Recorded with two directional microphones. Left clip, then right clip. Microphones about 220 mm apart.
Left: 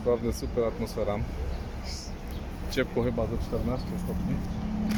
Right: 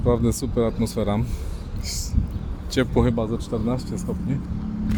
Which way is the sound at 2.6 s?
45° right (ahead or behind).